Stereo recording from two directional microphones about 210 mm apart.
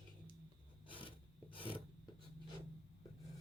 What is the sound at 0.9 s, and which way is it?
Filing, 25° left (ahead or behind).